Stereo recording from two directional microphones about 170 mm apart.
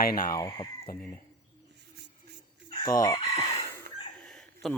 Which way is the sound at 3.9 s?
70° right (ahead or behind).